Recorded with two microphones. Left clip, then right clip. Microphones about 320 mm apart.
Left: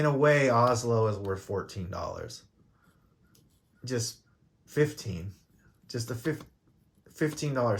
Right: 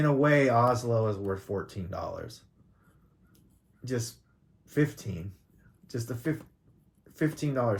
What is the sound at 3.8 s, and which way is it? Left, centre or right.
Speech, left.